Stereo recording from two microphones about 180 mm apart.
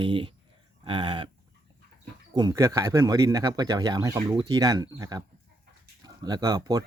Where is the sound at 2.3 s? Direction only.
20° right (ahead or behind).